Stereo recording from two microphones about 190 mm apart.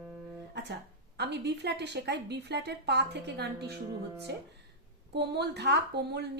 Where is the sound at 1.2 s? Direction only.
60° right (ahead or behind).